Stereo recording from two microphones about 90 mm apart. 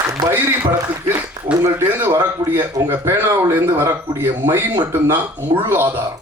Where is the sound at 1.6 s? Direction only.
35° right (ahead or behind).